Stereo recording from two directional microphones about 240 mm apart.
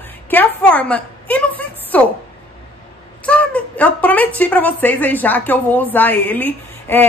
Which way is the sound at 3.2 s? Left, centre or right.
Centre.